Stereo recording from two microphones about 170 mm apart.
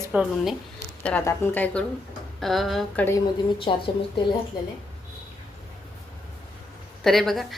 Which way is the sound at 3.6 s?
30° left (ahead or behind).